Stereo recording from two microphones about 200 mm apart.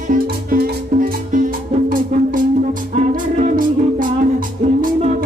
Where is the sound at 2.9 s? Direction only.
45° right (ahead or behind).